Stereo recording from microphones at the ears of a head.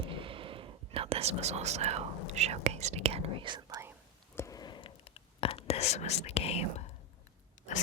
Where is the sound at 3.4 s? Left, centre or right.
Right.